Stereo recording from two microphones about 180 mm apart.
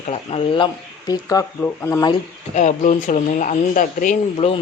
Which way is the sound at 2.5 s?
40° left (ahead or behind).